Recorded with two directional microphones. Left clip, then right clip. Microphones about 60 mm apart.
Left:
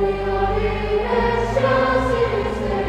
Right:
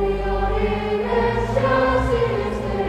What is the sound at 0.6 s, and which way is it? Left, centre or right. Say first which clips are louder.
Music: left 1 dB; right.